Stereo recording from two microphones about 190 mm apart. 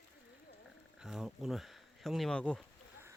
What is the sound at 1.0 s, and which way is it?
Speech, centre (ahead or behind).